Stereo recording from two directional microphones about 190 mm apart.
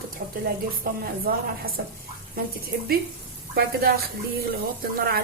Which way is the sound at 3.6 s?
55° right (ahead or behind).